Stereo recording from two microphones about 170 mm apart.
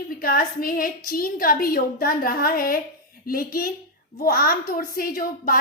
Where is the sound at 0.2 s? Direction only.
60° left (ahead or behind).